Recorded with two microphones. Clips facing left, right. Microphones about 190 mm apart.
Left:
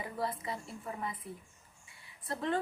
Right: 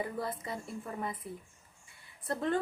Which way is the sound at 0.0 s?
50° right (ahead or behind).